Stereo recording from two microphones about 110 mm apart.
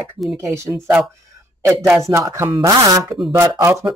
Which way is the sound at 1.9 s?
25° right (ahead or behind).